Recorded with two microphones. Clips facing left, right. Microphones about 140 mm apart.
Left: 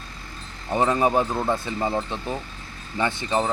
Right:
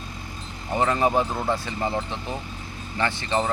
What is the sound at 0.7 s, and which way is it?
Speech, 15° left (ahead or behind).